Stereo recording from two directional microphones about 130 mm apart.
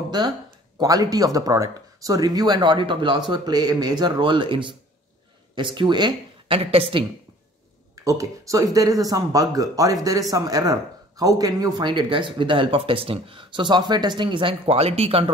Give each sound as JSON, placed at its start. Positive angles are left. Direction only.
{"t": 0.1, "sound": "speech", "side_deg": -35}
{"t": 6.6, "sound": "a woman's voice", "side_deg": -50}
{"t": 8.0, "sound": "speech", "side_deg": -25}